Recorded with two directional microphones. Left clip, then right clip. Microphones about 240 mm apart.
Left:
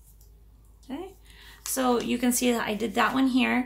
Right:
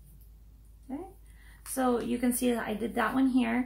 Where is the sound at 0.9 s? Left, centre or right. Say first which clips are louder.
Left 3 dB; left.